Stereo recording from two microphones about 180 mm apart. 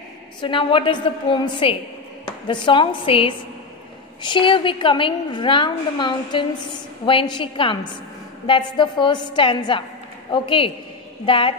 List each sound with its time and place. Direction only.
0.4 s a woman's voice: 30° left (ahead or behind)